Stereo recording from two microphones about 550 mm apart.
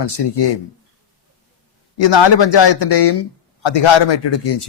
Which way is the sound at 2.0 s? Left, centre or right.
Left.